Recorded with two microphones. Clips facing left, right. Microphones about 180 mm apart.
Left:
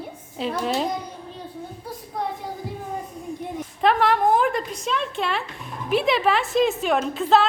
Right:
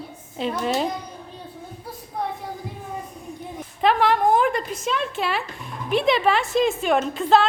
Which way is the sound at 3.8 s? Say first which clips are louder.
Even; centre (ahead or behind).